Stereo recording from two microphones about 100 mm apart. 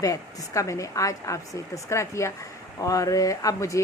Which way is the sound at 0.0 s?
35° left (ahead or behind).